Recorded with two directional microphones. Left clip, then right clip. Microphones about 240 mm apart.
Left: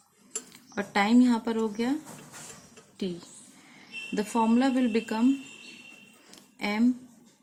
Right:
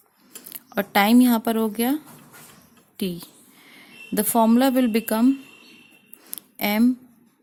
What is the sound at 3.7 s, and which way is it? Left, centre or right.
A woman's voice, right.